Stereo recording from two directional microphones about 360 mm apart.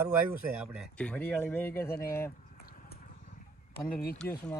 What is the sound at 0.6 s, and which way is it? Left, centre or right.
Speech, centre.